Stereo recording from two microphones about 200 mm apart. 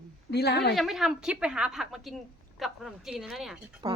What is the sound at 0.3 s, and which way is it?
Speech, 55° left (ahead or behind).